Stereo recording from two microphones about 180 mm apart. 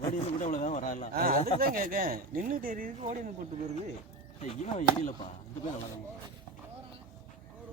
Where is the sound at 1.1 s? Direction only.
55° right (ahead or behind).